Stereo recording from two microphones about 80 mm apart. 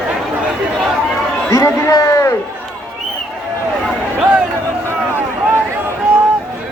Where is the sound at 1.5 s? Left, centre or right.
Left.